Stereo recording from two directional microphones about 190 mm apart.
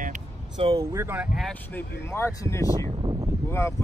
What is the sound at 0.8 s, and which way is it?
Speech, 15° right (ahead or behind).